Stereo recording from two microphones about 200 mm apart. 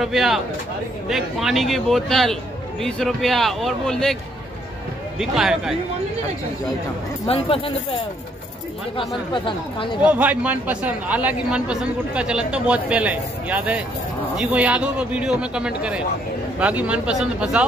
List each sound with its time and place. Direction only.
0.0 s a man's voice: centre (ahead or behind)
5.2 s a man's voice: centre (ahead or behind)
7.2 s speech: 30° left (ahead or behind)
8.9 s speech: 25° left (ahead or behind)
10.0 s a man's voice: 5° right (ahead or behind)